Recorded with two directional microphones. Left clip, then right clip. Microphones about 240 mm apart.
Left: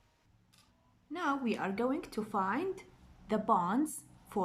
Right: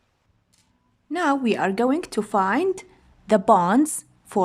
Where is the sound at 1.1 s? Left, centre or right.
Right.